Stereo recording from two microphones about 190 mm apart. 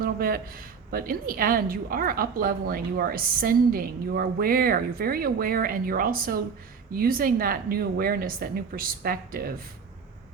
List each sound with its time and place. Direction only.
0.0 s a woman's voice: 50° right (ahead or behind)